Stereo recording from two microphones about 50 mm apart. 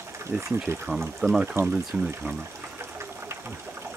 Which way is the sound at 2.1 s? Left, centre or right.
Right.